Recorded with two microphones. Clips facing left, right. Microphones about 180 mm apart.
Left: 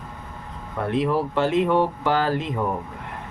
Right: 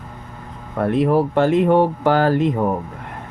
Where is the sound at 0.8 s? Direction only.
45° right (ahead or behind).